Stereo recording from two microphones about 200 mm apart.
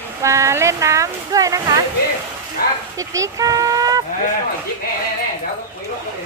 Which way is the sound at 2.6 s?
50° left (ahead or behind).